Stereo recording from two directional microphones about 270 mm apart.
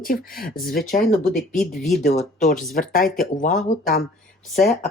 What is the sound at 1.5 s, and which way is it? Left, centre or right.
Speech, centre.